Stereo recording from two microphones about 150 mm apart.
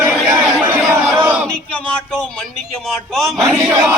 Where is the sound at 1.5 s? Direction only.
5° left (ahead or behind).